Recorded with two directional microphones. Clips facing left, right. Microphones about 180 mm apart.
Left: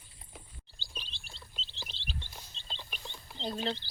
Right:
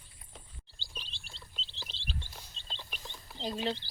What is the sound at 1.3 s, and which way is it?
Bird, centre (ahead or behind).